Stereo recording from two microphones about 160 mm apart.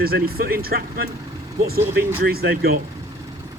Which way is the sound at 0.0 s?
70° right (ahead or behind).